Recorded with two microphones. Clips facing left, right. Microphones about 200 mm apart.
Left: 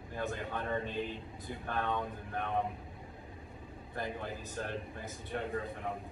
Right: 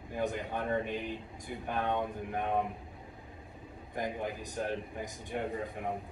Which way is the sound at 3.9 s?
15° right (ahead or behind).